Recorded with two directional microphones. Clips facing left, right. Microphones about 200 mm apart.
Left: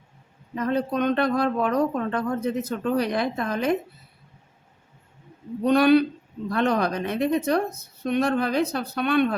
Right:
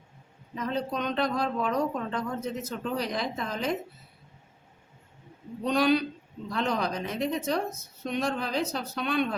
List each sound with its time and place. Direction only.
0.5 s speech: 60° left (ahead or behind)
5.6 s speech: 60° left (ahead or behind)